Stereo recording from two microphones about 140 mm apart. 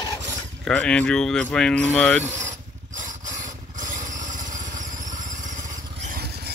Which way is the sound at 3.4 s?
65° right (ahead or behind).